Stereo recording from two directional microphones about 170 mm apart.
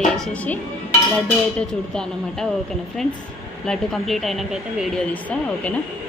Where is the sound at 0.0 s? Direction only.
5° left (ahead or behind).